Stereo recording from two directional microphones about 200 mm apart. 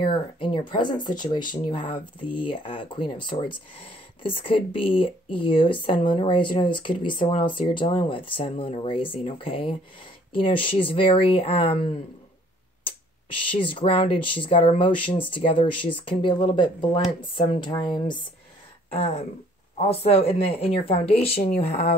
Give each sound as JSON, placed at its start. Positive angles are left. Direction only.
{"t": 0.0, "sound": "speech", "side_deg": 25}
{"t": 13.4, "sound": "speech", "side_deg": 25}
{"t": 18.9, "sound": "speech", "side_deg": 35}